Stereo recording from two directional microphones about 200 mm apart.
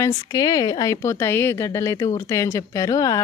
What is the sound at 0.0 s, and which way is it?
Speech, 15° left (ahead or behind).